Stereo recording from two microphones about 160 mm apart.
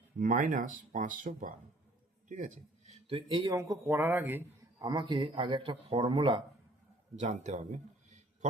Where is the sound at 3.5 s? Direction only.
20° right (ahead or behind).